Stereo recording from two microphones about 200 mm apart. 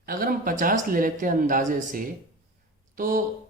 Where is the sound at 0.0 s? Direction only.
45° right (ahead or behind).